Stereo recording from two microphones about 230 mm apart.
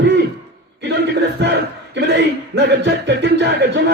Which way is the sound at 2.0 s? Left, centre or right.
Right.